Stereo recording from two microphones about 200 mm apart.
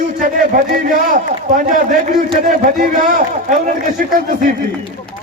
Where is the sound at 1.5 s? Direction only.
40° right (ahead or behind).